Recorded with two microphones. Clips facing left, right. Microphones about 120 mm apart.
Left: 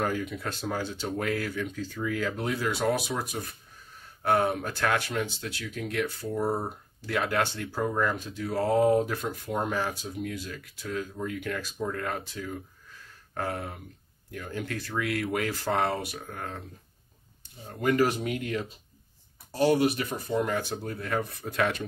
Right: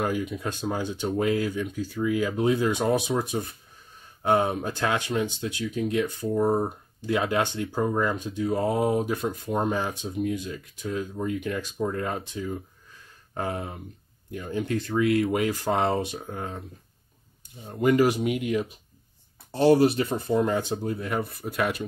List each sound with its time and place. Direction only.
0.0 s speech: 15° right (ahead or behind)
17.6 s speech: 20° right (ahead or behind)
19.5 s speech: 30° right (ahead or behind)
21.4 s speech: 5° right (ahead or behind)